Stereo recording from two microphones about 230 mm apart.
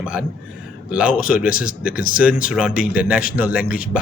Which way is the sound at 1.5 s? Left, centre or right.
Left.